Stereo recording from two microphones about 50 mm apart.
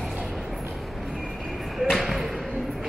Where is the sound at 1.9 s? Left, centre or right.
Centre.